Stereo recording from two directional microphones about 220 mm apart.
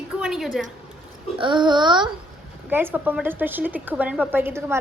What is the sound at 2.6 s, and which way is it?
A woman's voice, 10° right (ahead or behind).